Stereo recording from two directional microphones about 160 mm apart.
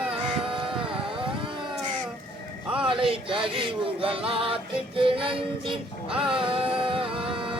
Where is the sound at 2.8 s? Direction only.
30° right (ahead or behind).